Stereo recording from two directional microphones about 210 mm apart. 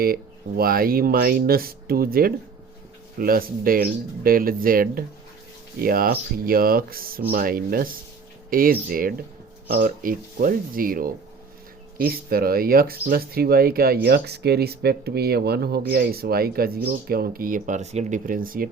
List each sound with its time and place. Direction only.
0.0 s speech: 45° right (ahead or behind)